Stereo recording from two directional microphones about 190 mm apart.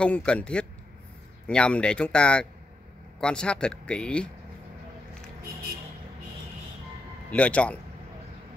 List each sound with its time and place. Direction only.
0.0 s speech: 5° left (ahead or behind)
7.2 s speech: 5° left (ahead or behind)